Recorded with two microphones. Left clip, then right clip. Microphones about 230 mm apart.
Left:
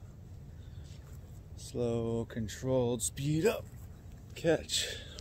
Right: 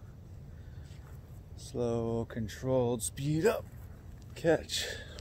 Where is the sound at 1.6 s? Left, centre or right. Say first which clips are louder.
Right 1 dB; centre.